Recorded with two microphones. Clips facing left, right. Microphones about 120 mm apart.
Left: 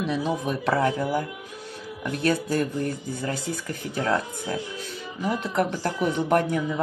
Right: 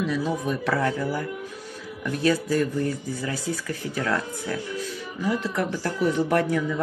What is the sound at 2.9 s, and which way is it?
Speech, 20° left (ahead or behind).